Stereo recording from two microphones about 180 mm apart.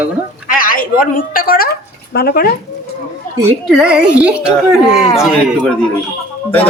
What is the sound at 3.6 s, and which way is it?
A woman's voice, 5° right (ahead or behind).